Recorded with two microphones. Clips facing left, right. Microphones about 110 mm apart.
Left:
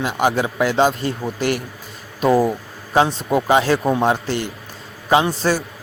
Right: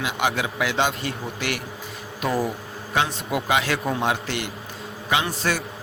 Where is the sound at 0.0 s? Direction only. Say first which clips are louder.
Left 6 dB; 40° left (ahead or behind).